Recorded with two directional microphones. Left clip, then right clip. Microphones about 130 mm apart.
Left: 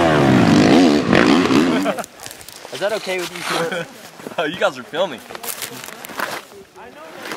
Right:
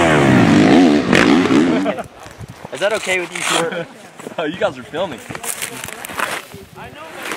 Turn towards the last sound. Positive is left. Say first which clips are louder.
# right 3 dB
turn(degrees=-5)  # may be behind; listen again after turning